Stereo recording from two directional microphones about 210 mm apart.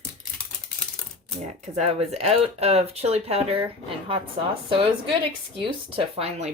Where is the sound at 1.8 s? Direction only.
30° right (ahead or behind).